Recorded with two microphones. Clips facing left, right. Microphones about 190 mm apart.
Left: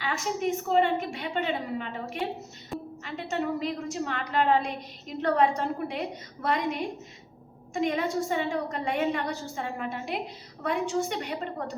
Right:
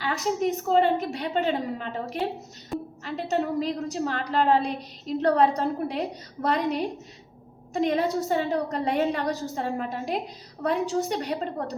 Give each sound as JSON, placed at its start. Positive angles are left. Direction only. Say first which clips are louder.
{"t": 0.0, "sound": "a woman's voice", "louder": "right 3 dB", "side_deg": -40}